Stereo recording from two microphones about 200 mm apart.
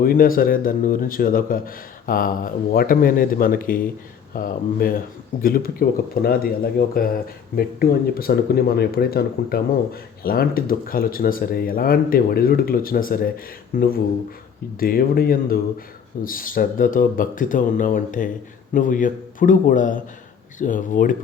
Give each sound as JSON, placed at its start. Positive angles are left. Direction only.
{"t": 0.0, "sound": "a man's voice", "side_deg": 45}